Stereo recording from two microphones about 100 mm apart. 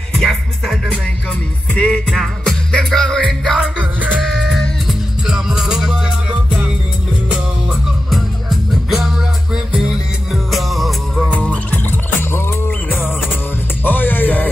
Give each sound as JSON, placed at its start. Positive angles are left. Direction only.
{"t": 0.2, "sound": "music", "side_deg": 0}
{"t": 1.8, "sound": "music", "side_deg": 5}
{"t": 3.5, "sound": "music", "side_deg": -10}
{"t": 4.2, "sound": "music", "side_deg": 0}
{"t": 8.1, "sound": "music", "side_deg": 0}
{"t": 10.3, "sound": "music", "side_deg": 0}
{"t": 11.2, "sound": "music", "side_deg": 10}